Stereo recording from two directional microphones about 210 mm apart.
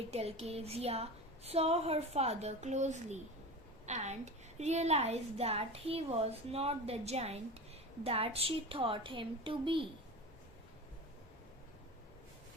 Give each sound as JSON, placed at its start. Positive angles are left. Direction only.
{"t": 0.1, "sound": "a woman's voice", "side_deg": -30}